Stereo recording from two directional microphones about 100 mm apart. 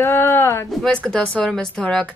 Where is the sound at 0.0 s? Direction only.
25° left (ahead or behind).